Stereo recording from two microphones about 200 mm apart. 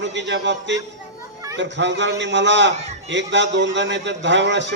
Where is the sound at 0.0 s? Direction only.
60° right (ahead or behind).